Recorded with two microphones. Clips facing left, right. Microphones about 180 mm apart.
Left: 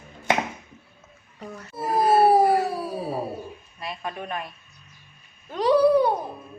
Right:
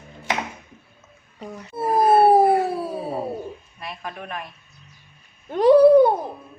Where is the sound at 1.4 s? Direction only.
15° right (ahead or behind).